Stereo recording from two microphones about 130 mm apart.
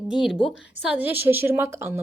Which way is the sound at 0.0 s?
5° right (ahead or behind).